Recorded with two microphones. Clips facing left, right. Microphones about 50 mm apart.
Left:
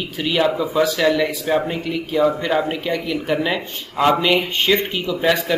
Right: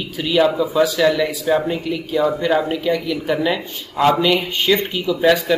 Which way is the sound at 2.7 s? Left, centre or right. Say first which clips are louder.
Right 3 dB; centre.